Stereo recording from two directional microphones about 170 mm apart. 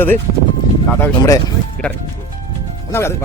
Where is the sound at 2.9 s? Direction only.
15° left (ahead or behind).